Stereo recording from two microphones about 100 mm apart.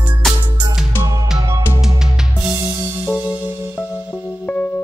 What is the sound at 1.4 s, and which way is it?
Music, 40° right (ahead or behind).